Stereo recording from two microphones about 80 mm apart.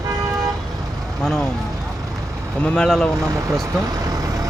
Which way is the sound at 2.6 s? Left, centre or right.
Centre.